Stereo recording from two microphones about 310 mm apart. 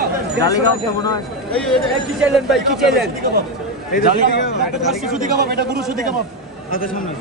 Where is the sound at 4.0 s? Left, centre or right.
Left.